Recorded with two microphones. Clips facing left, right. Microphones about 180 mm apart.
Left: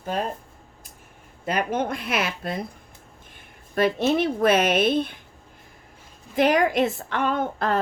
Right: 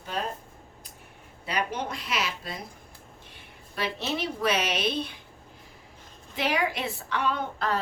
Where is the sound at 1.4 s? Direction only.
50° left (ahead or behind).